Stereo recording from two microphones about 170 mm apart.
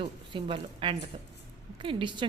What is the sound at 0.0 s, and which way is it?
A woman's voice, 30° right (ahead or behind).